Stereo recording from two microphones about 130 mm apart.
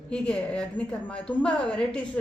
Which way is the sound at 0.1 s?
5° left (ahead or behind).